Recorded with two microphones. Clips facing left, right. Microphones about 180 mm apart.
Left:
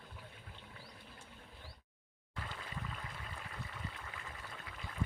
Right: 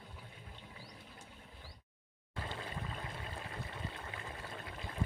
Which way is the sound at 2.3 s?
30° right (ahead or behind).